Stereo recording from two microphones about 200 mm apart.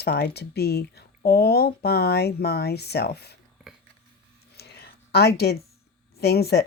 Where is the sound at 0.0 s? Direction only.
55° left (ahead or behind).